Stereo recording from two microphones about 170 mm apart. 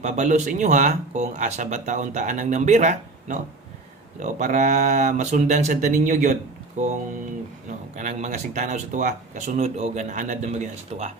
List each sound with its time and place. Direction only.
0.0 s speech: 45° right (ahead or behind)
7.9 s speech: 45° right (ahead or behind)